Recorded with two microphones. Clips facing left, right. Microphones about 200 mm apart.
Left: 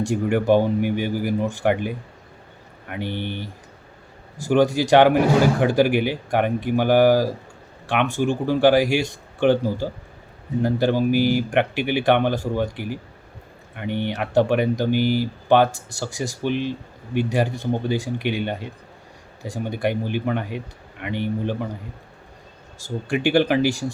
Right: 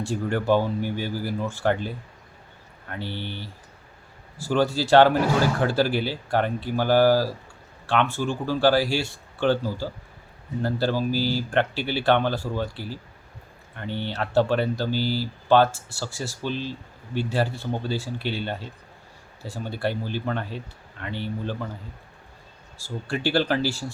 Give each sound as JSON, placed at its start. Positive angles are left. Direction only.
{"t": 0.0, "sound": "speech", "side_deg": 15}
{"t": 22.8, "sound": "speech", "side_deg": 15}